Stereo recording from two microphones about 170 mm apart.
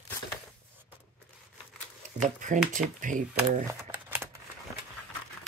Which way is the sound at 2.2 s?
45° right (ahead or behind).